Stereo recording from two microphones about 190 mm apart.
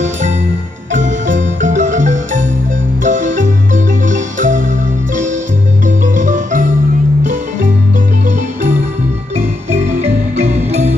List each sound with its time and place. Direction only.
0.9 s marimba: 40° right (ahead or behind)
5.9 s music: 40° right (ahead or behind)
9.7 s music: 40° right (ahead or behind)